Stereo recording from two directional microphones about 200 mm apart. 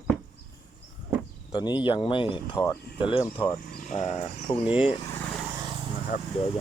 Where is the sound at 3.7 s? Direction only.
40° left (ahead or behind).